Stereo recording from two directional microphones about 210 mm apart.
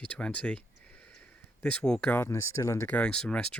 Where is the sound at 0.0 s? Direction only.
5° left (ahead or behind).